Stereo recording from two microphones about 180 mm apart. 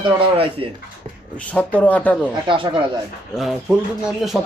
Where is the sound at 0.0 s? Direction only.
30° right (ahead or behind).